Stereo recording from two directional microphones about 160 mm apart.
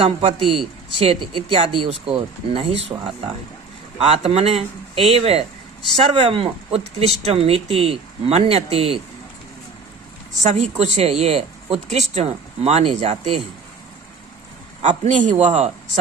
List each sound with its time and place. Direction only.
0.0 s speech: 35° right (ahead or behind)
3.9 s speech: 35° right (ahead or behind)
10.4 s speech: 45° right (ahead or behind)
14.8 s a man's voice: 45° right (ahead or behind)